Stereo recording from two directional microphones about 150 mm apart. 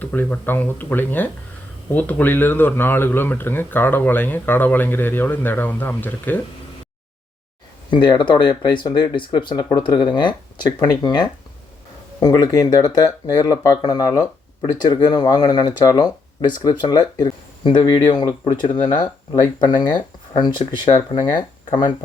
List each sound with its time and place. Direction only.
0.0 s speech: 10° left (ahead or behind)
7.9 s speech: 30° left (ahead or behind)